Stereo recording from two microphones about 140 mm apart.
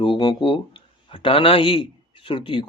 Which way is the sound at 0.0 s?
35° left (ahead or behind).